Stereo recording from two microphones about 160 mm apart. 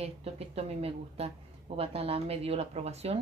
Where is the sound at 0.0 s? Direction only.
40° right (ahead or behind).